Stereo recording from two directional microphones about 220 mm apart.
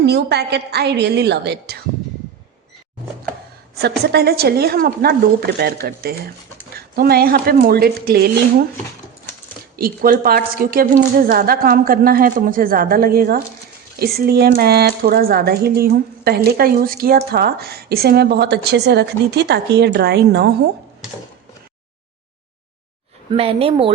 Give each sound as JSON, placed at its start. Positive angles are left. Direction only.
{"t": 0.0, "sound": "a woman's voice", "side_deg": -50}
{"t": 3.8, "sound": "a woman's voice", "side_deg": -45}
{"t": 9.7, "sound": "a woman's voice", "side_deg": -40}
{"t": 23.4, "sound": "speech", "side_deg": -25}